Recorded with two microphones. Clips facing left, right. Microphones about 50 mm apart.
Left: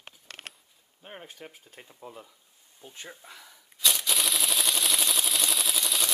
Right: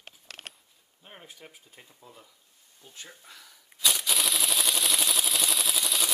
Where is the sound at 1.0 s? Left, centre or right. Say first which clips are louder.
Left 5 dB; centre.